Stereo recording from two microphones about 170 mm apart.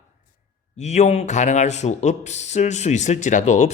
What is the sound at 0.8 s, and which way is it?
Speech, 40° left (ahead or behind).